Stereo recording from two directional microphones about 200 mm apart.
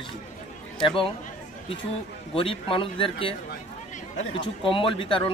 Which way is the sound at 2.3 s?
25° left (ahead or behind).